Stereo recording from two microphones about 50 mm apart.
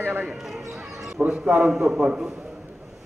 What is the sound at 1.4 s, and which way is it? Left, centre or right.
Speech, centre.